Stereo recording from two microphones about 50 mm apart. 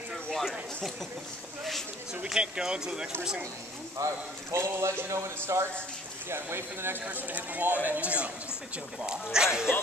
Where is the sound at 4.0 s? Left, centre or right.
Right.